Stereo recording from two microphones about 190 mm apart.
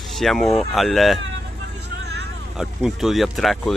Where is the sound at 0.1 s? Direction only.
Centre (ahead or behind).